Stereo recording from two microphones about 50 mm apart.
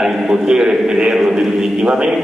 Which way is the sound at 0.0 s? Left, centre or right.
Centre.